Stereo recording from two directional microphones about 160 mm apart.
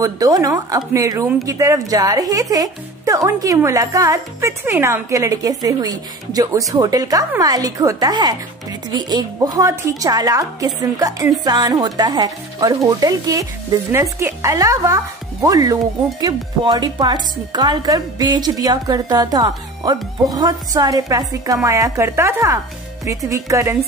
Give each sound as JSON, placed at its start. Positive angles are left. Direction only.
{"t": 0.0, "sound": "speech", "side_deg": -20}